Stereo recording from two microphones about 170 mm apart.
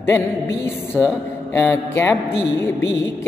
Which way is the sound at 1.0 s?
5° right (ahead or behind).